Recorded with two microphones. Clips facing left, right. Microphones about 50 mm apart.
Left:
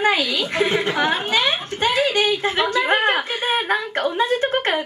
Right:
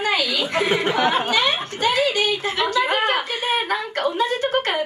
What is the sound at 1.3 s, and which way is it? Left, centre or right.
A woman's voice, left.